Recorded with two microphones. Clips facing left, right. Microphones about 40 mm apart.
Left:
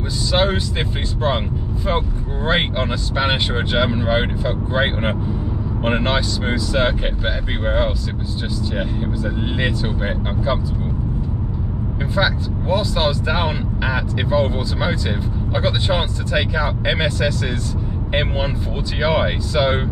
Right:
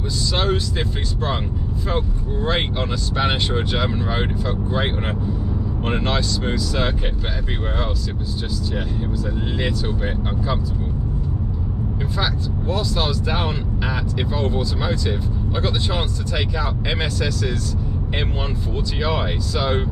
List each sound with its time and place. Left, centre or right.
0.3 s speech: left
12.0 s speech: left
18.9 s speech: left